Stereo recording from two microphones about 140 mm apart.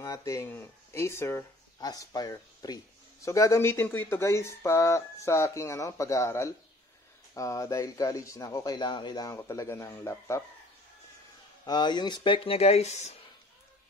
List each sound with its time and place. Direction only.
0.0 s speech: 25° left (ahead or behind)
11.6 s speech: 30° left (ahead or behind); by 13.1 s 50° left (ahead or behind)